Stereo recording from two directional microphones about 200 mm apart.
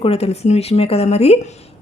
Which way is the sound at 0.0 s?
30° left (ahead or behind).